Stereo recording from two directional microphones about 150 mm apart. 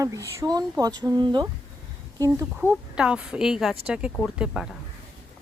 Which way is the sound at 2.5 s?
5° right (ahead or behind).